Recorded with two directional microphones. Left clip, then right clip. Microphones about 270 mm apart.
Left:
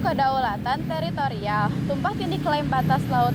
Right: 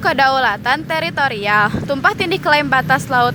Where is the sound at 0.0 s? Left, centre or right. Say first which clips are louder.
Right 8 dB; right.